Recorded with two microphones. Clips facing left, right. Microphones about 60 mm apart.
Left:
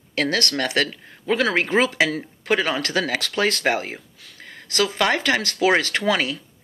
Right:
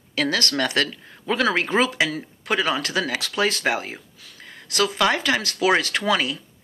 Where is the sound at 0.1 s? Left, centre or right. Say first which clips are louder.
Left 1 dB; left.